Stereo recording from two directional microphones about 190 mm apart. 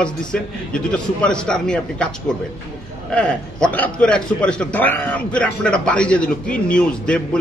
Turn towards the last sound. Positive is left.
turn(degrees=5)  # may be behind; listen again after turning